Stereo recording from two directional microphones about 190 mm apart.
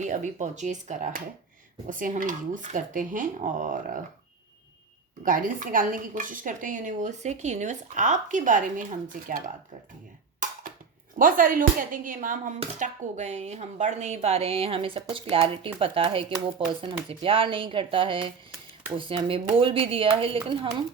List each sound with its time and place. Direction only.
0.0 s speech: 40° right (ahead or behind)
5.2 s speech: 45° right (ahead or behind)
11.2 s speech: 45° right (ahead or behind); by 20.7 s 25° right (ahead or behind)